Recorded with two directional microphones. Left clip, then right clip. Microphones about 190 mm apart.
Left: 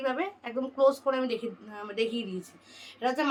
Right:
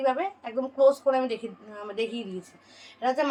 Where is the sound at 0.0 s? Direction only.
15° left (ahead or behind).